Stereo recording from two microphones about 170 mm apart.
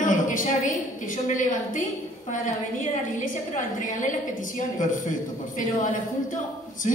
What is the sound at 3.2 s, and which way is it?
A man's voice, 50° left (ahead or behind).